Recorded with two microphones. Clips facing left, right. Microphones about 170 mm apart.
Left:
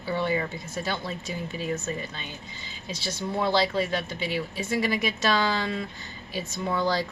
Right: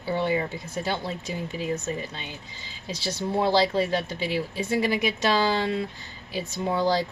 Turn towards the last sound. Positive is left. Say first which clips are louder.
# right 2 dB
turn(degrees=-25)  # may be behind; listen again after turning